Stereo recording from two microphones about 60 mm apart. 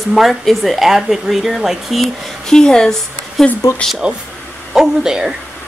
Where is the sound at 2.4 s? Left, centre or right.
Centre.